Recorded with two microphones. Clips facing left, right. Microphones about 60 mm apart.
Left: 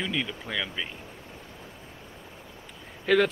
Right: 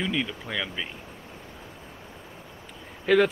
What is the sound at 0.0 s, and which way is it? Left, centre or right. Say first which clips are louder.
Speech: right 2 dB; centre.